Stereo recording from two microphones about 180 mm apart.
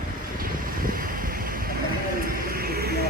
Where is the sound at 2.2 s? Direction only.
55° right (ahead or behind).